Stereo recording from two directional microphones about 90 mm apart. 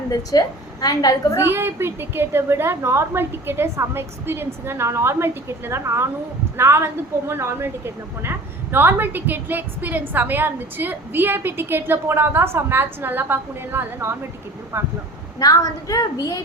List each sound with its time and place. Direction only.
0.3 s a woman's voice: 45° left (ahead or behind)
1.4 s a woman's voice: 25° right (ahead or behind)
15.4 s a woman's voice: 40° left (ahead or behind)